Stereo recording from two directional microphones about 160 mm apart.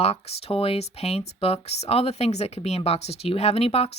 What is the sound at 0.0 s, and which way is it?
Speech, 40° left (ahead or behind).